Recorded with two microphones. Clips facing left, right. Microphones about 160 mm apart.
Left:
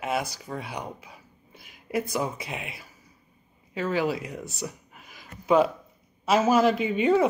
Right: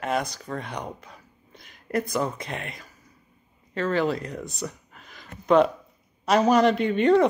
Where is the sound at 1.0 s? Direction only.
10° left (ahead or behind).